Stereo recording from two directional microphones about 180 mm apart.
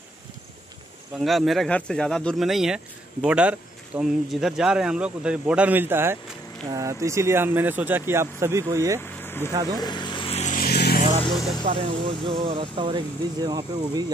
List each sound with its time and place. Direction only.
1.2 s speech: centre (ahead or behind); by 9.0 s 15° right (ahead or behind)
9.0 s vehicle: 10° left (ahead or behind)
9.8 s vehicle: 25° left (ahead or behind)
10.6 s vehicle: 60° left (ahead or behind)
11.6 s speech: 30° right (ahead or behind)